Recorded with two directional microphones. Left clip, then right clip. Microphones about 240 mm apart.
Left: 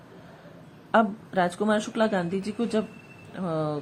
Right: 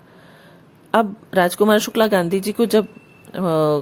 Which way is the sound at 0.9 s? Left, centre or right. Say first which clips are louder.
Right 4 dB; right.